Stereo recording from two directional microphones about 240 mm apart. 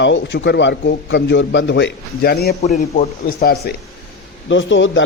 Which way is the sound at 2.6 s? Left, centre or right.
Left.